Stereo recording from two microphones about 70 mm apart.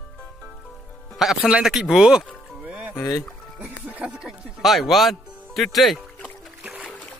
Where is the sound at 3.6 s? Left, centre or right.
Centre.